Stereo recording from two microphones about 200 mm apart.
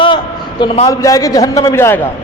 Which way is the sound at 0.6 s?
20° left (ahead or behind).